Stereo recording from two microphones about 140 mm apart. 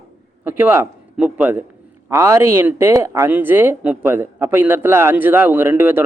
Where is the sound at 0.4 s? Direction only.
15° right (ahead or behind).